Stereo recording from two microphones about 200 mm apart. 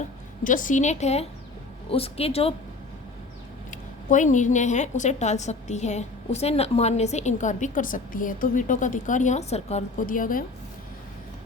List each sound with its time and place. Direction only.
0.4 s a woman's voice: 40° left (ahead or behind)
3.7 s a woman's voice: 40° left (ahead or behind)